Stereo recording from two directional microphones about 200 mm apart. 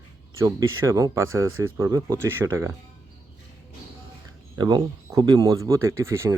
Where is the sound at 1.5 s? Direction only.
90° right.